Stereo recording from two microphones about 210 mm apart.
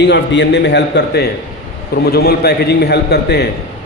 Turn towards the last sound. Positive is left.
turn(degrees=50)  # may be behind; listen again after turning